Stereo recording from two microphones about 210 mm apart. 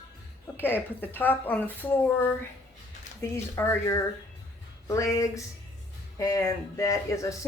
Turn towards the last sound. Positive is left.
turn(degrees=15)  # may be behind; listen again after turning